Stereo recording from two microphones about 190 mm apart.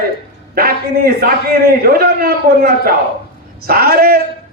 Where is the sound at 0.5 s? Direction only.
55° right (ahead or behind).